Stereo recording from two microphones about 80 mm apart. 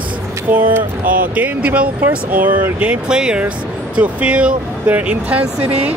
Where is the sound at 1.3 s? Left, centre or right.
Centre.